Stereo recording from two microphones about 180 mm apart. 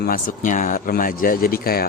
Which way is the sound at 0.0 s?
50° left (ahead or behind).